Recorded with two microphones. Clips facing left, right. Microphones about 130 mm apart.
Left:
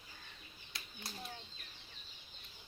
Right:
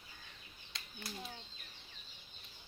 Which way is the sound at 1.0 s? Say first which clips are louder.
Right 3 dB; 30° left (ahead or behind).